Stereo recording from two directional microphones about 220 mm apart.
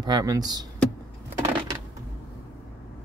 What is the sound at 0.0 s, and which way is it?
Speech, 15° right (ahead or behind).